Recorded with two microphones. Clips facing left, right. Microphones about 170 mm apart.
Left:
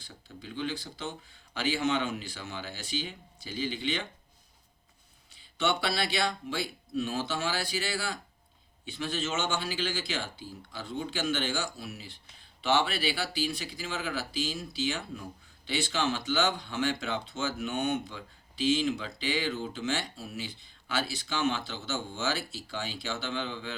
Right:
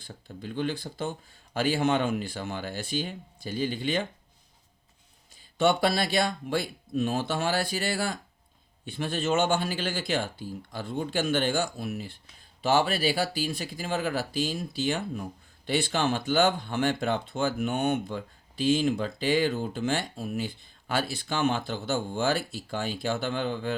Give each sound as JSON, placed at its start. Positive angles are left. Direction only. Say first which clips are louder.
{"t": 0.0, "sound": "speech", "louder": "right 6 dB", "side_deg": -50}
{"t": 5.3, "sound": "speech", "louder": "right 6 dB", "side_deg": -45}